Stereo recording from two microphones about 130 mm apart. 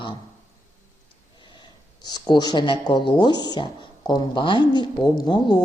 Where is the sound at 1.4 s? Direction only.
40° left (ahead or behind).